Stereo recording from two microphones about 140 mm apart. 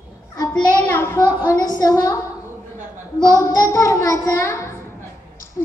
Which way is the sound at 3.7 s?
20° left (ahead or behind).